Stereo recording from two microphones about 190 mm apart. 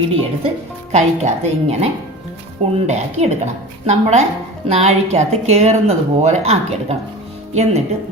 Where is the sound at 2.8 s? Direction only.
35° right (ahead or behind).